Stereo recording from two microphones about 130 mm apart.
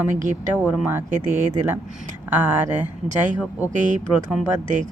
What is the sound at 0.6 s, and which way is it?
Speech, 15° right (ahead or behind).